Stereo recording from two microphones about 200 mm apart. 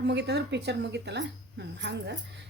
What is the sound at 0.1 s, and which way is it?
A woman's voice, 60° right (ahead or behind).